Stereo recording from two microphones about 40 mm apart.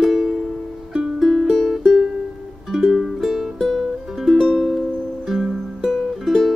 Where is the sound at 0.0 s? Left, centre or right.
Centre.